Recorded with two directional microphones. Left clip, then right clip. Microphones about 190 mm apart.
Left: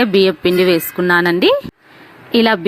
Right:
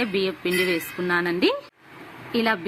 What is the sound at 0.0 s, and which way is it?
Speech, 45° left (ahead or behind).